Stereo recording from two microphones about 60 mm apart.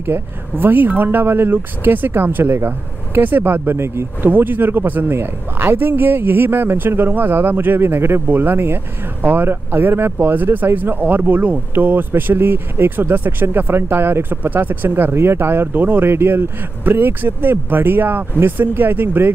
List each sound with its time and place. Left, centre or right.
0.0 s speech: right
4.3 s speech: right